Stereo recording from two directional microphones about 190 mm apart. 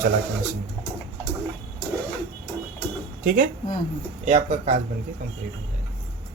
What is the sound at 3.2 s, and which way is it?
Speech, 45° right (ahead or behind).